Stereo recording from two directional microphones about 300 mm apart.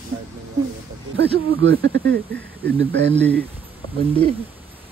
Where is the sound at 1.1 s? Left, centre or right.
Right.